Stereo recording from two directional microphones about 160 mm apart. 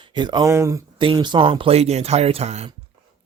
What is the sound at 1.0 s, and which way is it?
Speech, 30° right (ahead or behind).